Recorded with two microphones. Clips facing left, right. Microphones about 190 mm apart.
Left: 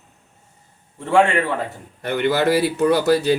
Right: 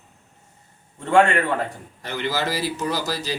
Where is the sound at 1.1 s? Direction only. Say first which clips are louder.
Left 1 dB; 5° left (ahead or behind).